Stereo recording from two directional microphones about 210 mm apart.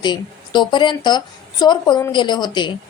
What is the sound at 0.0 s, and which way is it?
Speech, 20° left (ahead or behind).